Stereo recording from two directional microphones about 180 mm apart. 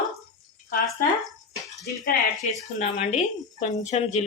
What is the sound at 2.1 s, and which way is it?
Speech, 40° left (ahead or behind).